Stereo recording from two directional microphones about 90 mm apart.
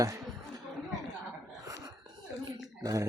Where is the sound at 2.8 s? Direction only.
40° right (ahead or behind).